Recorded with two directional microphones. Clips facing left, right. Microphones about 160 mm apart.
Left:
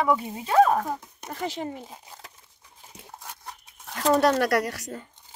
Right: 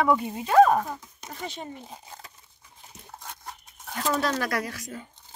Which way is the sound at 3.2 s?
Centre (ahead or behind).